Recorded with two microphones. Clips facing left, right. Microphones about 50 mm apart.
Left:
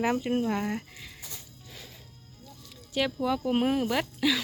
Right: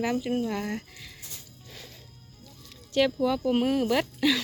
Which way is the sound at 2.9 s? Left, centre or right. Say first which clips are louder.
Right 4 dB; centre.